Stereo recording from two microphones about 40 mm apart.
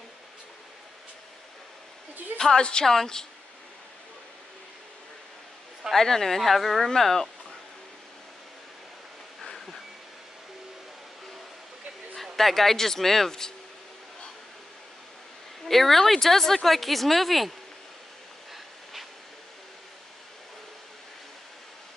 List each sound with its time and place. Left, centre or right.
2.3 s speech: centre
5.9 s speech: centre
12.2 s speech: centre
15.6 s speech: centre